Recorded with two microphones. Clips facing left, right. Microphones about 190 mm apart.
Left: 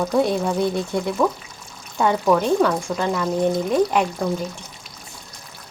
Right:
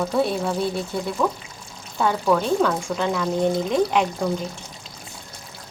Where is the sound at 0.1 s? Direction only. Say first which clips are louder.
Left 2 dB; 15° left (ahead or behind).